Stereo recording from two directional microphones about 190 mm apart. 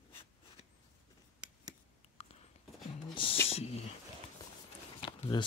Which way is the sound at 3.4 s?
30° left (ahead or behind).